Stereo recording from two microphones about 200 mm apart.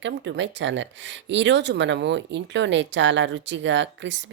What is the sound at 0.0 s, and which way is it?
Speech, 65° right (ahead or behind).